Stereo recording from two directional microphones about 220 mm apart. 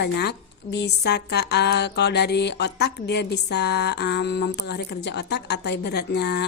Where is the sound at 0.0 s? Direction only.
50° left (ahead or behind).